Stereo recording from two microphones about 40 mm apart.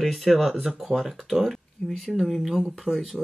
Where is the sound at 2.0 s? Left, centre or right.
Centre.